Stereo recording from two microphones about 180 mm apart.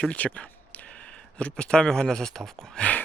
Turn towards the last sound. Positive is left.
turn(degrees=5)  # may be behind; listen again after turning